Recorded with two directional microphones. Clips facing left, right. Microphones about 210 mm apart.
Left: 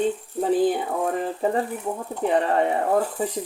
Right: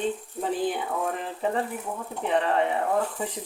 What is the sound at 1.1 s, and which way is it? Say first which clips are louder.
Speech: left 5 dB; 40° left (ahead or behind).